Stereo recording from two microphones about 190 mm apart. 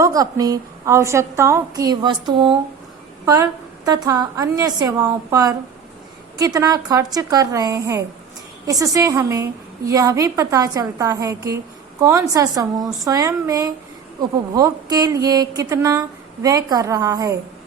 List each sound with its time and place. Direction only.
0.0 s a woman's voice: 20° right (ahead or behind)